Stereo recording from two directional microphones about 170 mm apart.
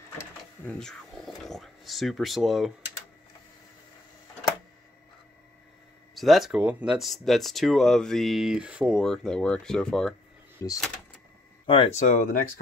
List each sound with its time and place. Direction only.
0.2 s sewing machine: 5° left (ahead or behind)
6.1 s speech: centre (ahead or behind)
10.6 s speech: 20° left (ahead or behind)
11.6 s speech: 30° left (ahead or behind); by 12.4 s 50° left (ahead or behind)